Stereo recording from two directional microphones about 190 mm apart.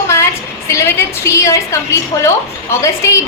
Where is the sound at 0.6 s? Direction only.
15° left (ahead or behind).